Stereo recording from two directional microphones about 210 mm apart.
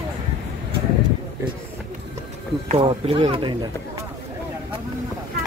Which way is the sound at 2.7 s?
25° right (ahead or behind).